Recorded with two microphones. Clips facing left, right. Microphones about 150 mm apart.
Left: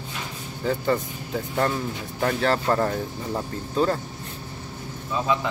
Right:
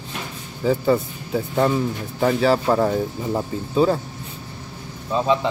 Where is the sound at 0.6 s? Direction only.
5° right (ahead or behind).